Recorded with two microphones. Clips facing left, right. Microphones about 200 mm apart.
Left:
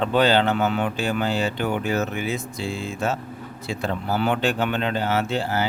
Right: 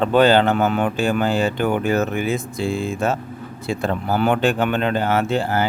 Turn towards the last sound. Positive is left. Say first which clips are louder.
# right 4 dB
turn(degrees=-55)  # may be behind; listen again after turning